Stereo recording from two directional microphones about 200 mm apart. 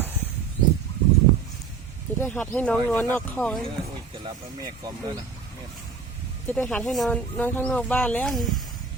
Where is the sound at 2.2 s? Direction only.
5° left (ahead or behind).